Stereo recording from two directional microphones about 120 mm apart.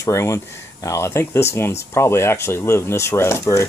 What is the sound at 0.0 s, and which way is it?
Speech, 25° left (ahead or behind).